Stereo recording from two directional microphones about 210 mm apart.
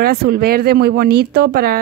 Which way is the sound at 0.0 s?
50° right (ahead or behind).